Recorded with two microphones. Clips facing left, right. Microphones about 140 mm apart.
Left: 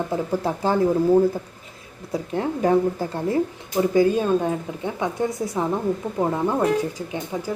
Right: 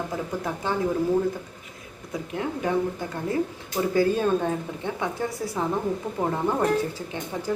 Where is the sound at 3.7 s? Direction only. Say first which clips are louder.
Left 4 dB; 15° left (ahead or behind).